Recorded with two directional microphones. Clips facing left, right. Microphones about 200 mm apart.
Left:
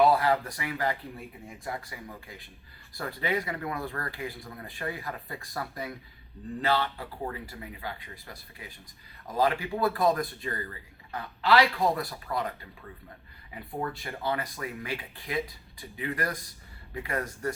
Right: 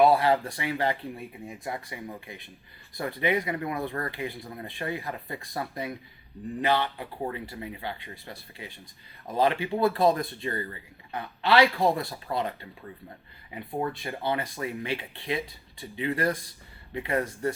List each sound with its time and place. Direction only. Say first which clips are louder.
0.0 s speech: right 2 dB; 25° right (ahead or behind)